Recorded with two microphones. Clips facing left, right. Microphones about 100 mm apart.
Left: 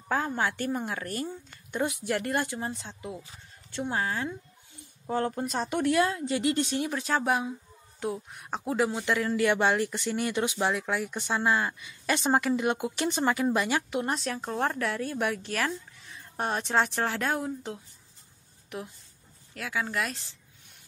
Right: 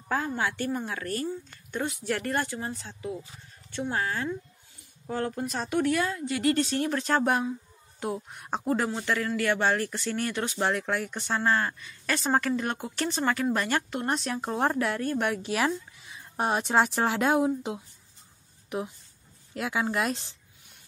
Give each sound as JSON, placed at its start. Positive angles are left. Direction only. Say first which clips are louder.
{"t": 0.4, "sound": "a woman's voice", "louder": "even", "side_deg": 20}
{"t": 5.0, "sound": "a woman's voice", "louder": "left 2 dB", "side_deg": 30}
{"t": 6.8, "sound": "speech", "louder": "right 3 dB", "side_deg": 10}
{"t": 10.5, "sound": "speech", "louder": "right 1 dB", "side_deg": 5}
{"t": 19.5, "sound": "speech", "louder": "right 3 dB", "side_deg": -20}